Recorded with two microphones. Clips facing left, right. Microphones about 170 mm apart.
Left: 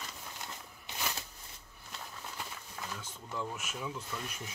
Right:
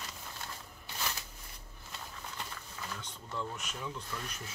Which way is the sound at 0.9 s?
20° left (ahead or behind).